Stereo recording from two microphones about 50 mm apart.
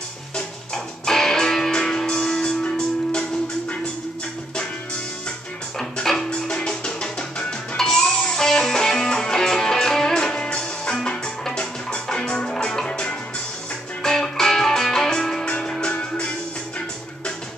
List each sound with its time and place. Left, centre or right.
0.7 s music: centre
5.8 s music: centre
11.1 s music: centre